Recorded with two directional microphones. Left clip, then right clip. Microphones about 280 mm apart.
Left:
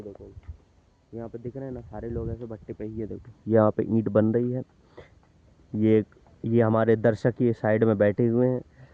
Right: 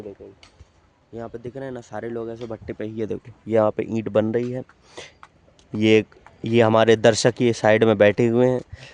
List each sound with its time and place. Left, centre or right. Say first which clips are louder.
1.1 s a man's voice: right 4 dB; centre
1.6 s speech: right 5 dB; centre
2.6 s speech: right 7 dB; right
3.5 s speech: right 2 dB; centre